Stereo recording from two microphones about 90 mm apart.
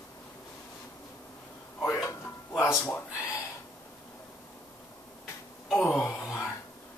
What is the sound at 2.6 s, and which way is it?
Speech, 35° left (ahead or behind).